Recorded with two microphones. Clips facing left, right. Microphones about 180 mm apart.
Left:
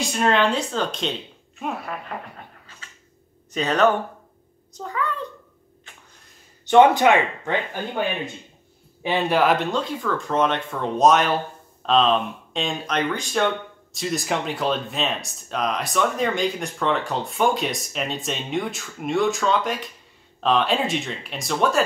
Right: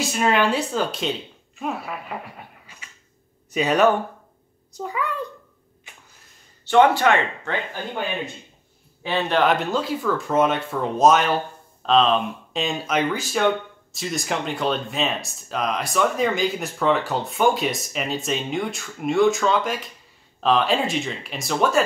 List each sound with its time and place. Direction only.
0.0 s a child's voice: 5° right (ahead or behind)
6.6 s speech: 20° left (ahead or behind)
9.0 s speech: 10° left (ahead or behind)